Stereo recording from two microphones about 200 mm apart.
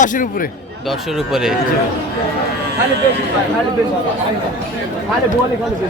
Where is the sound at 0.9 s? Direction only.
Centre (ahead or behind).